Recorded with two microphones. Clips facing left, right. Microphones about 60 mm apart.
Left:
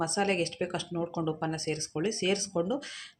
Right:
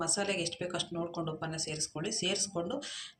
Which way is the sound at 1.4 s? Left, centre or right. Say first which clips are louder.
Left 7 dB; left.